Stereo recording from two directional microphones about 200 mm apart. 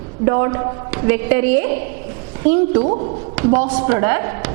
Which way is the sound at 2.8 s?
30° right (ahead or behind).